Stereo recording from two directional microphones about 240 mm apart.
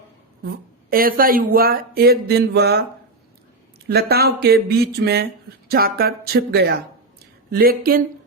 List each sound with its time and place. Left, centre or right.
0.9 s speech: right
3.8 s speech: right